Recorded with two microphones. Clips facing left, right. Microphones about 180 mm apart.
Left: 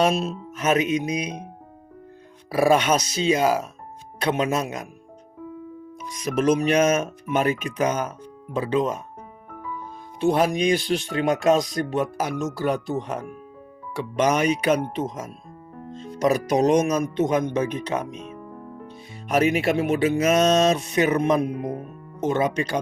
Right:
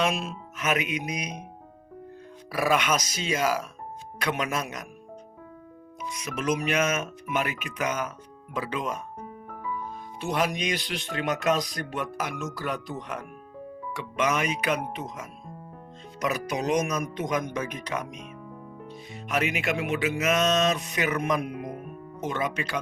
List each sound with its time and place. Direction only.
0.0 s speech: 35° left (ahead or behind)
2.5 s speech: 30° left (ahead or behind)
6.4 s speech: 30° left (ahead or behind)
10.2 s speech: 30° left (ahead or behind)
19.3 s speech: 35° left (ahead or behind)